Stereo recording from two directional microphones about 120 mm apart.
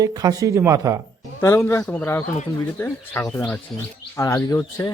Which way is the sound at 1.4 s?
20° left (ahead or behind).